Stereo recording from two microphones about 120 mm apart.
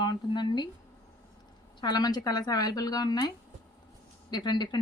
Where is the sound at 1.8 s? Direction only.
35° left (ahead or behind).